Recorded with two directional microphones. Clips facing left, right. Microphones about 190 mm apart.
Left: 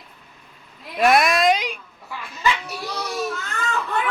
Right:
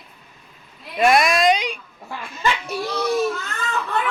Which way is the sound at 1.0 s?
Centre (ahead or behind).